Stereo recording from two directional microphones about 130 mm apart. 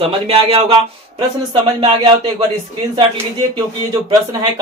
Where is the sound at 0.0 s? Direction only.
50° right (ahead or behind).